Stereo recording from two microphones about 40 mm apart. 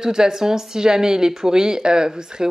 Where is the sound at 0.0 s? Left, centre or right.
Centre.